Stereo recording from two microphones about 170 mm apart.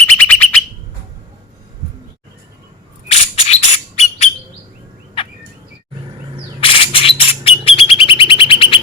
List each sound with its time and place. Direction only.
0.1 s alarm: 10° left (ahead or behind)
3.1 s bird: 40° left (ahead or behind)
6.6 s bird: 30° left (ahead or behind)